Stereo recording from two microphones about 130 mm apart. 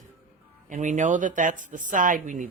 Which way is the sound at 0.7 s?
70° right (ahead or behind).